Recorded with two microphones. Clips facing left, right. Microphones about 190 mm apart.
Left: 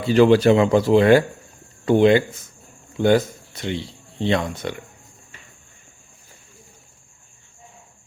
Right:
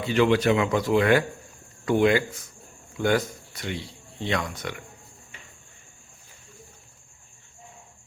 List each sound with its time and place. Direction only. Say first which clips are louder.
0.0 s speech: left 7 dB; 35° left (ahead or behind)